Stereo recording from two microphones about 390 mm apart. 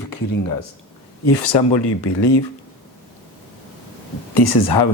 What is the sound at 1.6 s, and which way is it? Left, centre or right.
Speech, left.